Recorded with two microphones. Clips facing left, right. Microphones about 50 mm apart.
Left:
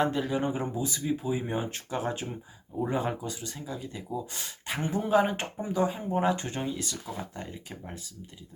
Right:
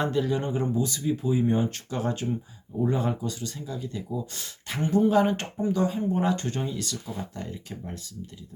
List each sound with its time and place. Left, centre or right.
0.0 s speech: centre